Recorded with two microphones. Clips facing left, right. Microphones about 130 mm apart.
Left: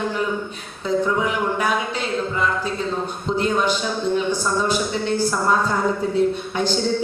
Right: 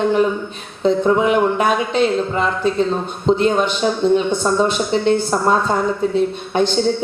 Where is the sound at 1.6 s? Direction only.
20° right (ahead or behind).